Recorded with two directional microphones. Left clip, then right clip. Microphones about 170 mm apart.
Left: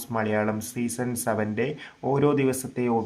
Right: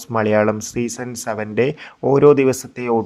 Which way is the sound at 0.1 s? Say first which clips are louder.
Right 9 dB; 40° right (ahead or behind).